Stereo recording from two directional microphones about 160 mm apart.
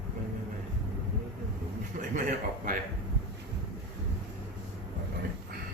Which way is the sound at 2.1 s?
55° right (ahead or behind).